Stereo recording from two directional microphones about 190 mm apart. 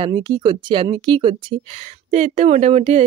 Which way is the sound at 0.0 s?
25° right (ahead or behind).